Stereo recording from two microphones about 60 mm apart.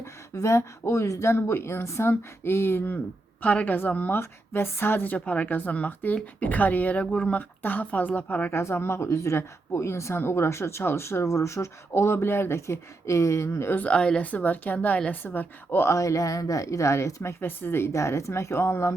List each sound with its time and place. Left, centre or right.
0.0 s speech: left
1.3 s speech: left
3.4 s a woman's voice: left
4.1 s speech: left
5.1 s a woman's voice: left
8.5 s speech: left
13.7 s a woman's voice: left
14.3 s a woman's voice: left
15.9 s speech: left
17.4 s speech: left